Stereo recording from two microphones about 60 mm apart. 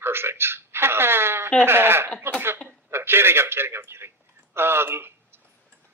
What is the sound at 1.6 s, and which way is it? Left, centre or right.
A man's voice, right.